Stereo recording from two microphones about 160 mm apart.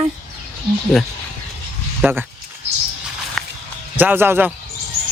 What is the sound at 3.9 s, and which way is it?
Speech, 10° right (ahead or behind).